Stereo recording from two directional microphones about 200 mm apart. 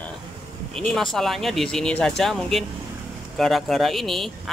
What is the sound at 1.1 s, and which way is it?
Speech, centre (ahead or behind).